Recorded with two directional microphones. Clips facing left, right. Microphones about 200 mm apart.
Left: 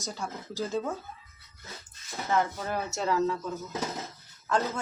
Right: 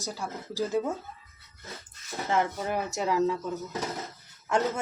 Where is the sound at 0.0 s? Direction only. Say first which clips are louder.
Right 1 dB; 10° right (ahead or behind).